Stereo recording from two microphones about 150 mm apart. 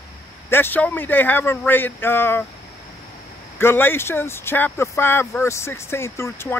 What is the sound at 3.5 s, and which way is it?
Speech, 15° left (ahead or behind).